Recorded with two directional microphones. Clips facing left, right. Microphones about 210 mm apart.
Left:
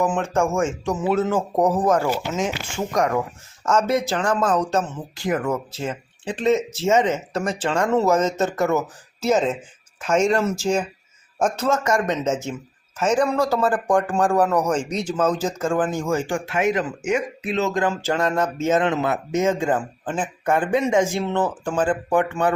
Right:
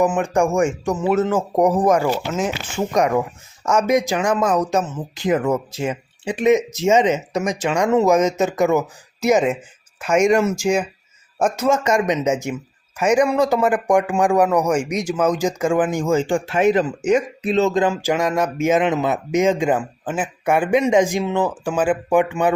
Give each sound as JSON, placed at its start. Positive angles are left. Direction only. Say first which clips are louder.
{"t": 0.0, "sound": "speech", "louder": "right 3 dB", "side_deg": -10}
{"t": 2.9, "sound": "speech", "louder": "right 3 dB", "side_deg": -20}
{"t": 5.1, "sound": "speech", "louder": "right 4 dB", "side_deg": -20}
{"t": 17.9, "sound": "speech", "louder": "right 2 dB", "side_deg": -10}